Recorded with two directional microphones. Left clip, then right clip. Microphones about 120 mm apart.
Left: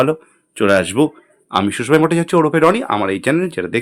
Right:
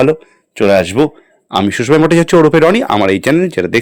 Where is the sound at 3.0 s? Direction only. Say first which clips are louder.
Right 6 dB; 60° right (ahead or behind).